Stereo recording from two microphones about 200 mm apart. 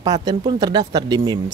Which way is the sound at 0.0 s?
20° right (ahead or behind).